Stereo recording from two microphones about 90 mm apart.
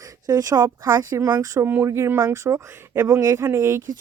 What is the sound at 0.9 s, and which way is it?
Speech, 30° right (ahead or behind).